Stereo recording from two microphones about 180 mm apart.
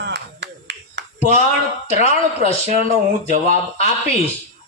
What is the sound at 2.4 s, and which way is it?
Speech, 35° left (ahead or behind).